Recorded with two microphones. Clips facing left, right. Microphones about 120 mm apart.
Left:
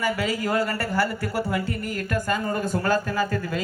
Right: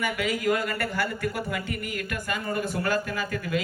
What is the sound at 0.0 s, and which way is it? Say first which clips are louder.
Speech: left 1 dB; 30° left (ahead or behind).